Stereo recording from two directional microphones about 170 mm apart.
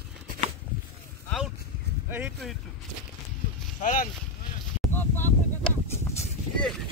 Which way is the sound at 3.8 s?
50° left (ahead or behind).